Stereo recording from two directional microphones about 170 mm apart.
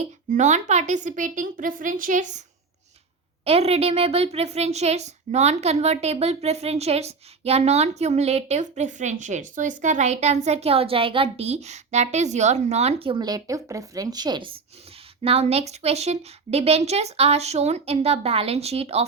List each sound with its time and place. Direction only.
0.0 s a woman's voice: 45° right (ahead or behind)
3.4 s a child's voice: 35° right (ahead or behind)